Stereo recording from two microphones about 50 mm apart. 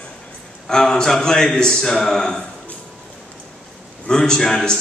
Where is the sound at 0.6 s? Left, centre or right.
Centre.